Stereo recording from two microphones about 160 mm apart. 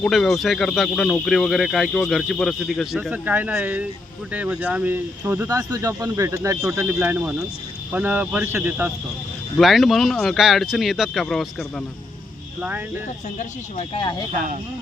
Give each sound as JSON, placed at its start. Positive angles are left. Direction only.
{"t": 0.0, "sound": "speech", "side_deg": 0}
{"t": 9.6, "sound": "speech", "side_deg": 0}
{"t": 13.4, "sound": "speech", "side_deg": 40}